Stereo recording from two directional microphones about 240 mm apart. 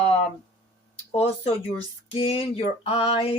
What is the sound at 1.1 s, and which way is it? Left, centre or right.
Speech, left.